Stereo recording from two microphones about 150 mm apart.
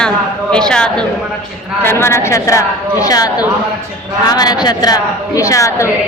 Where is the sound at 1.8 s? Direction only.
15° left (ahead or behind).